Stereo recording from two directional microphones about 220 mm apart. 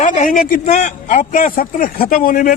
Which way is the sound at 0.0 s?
40° left (ahead or behind).